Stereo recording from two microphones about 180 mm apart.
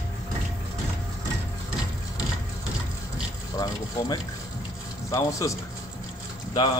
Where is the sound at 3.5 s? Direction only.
20° left (ahead or behind).